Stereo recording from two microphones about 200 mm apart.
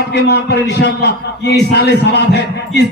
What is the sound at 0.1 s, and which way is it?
Speech, 55° left (ahead or behind).